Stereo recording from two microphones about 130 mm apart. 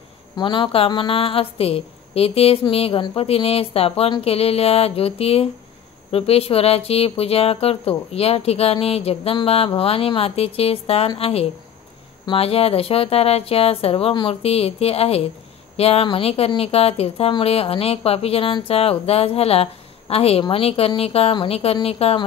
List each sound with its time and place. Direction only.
0.4 s speech: 40° left (ahead or behind)